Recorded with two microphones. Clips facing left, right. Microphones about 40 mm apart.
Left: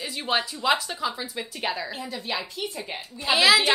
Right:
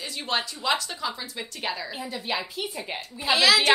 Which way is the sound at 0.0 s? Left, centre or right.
Centre.